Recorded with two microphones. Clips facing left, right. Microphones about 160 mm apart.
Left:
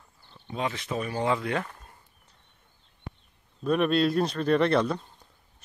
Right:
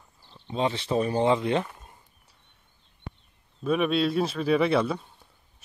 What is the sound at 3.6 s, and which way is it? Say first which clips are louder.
Speech: left 1 dB; centre (ahead or behind).